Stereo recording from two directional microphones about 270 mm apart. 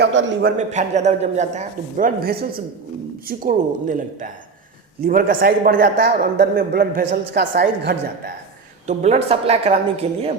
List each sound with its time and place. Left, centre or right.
0.0 s a man's voice: right
0.5 s a man's voice: right
8.9 s a man's voice: right